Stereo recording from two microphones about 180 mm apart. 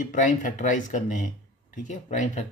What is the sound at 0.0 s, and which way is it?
Speech, 45° left (ahead or behind).